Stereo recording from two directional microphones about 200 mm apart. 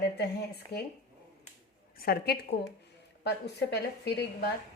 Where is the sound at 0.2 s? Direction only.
55° left (ahead or behind).